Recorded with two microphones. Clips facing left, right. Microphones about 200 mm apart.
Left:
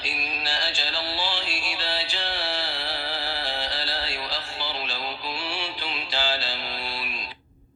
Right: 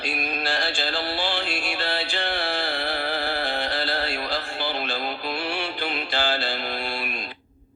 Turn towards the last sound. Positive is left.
turn(degrees=-55)  # may be behind; listen again after turning